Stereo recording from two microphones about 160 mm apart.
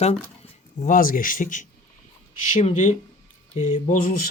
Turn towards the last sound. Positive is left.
turn(degrees=55)  # may be behind; listen again after turning